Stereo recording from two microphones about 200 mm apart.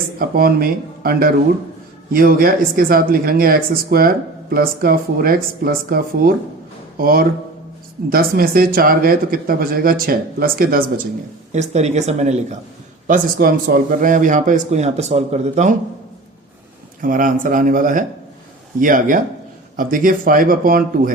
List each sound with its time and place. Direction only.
0.2 s speech: 45° right (ahead or behind)
11.5 s a man's voice: 35° right (ahead or behind)
17.0 s a man's voice: 40° right (ahead or behind)